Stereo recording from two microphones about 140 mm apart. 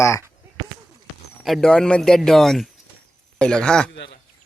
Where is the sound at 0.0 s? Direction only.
20° left (ahead or behind).